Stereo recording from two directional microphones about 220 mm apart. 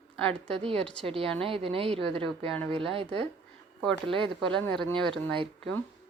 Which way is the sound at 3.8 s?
5° left (ahead or behind).